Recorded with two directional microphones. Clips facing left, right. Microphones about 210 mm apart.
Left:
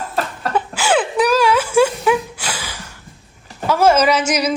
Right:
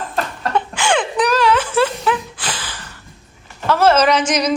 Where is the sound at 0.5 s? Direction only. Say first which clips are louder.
Left 1 dB; 5° left (ahead or behind).